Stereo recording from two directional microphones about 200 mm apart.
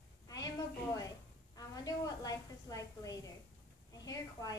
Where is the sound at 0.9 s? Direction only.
15° left (ahead or behind).